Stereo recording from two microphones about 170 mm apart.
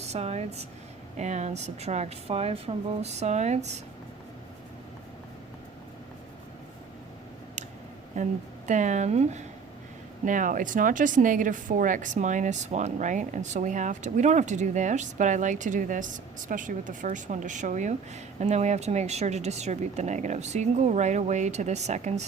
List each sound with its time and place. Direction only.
0.0 s speech: 40° right (ahead or behind)
8.1 s a woman's voice: 45° right (ahead or behind)